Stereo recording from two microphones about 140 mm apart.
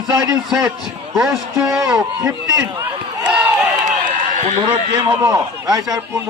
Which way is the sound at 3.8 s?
60° right (ahead or behind).